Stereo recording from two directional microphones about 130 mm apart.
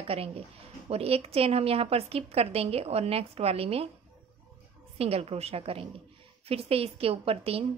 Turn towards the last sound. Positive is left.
turn(degrees=-50)  # may be behind; listen again after turning